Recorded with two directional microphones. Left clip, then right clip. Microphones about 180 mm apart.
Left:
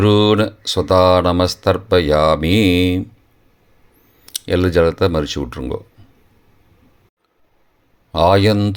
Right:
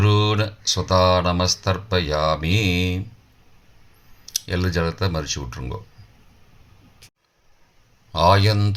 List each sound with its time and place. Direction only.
0.0 s speech: 50° left (ahead or behind)
4.3 s speech: 50° left (ahead or behind)
8.1 s speech: 50° left (ahead or behind)